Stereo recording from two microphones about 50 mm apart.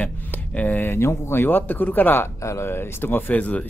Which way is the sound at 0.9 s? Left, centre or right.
Left.